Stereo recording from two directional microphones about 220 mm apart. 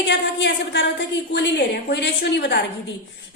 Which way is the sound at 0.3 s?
55° left (ahead or behind).